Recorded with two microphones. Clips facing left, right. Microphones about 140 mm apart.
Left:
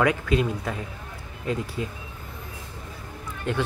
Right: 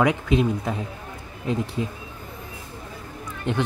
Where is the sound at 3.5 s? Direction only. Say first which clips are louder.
Right 2 dB; 20° right (ahead or behind).